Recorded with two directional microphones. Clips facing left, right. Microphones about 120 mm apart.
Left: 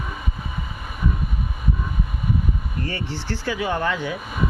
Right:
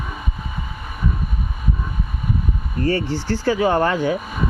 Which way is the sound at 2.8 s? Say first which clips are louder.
Right 10 dB; 45° right (ahead or behind).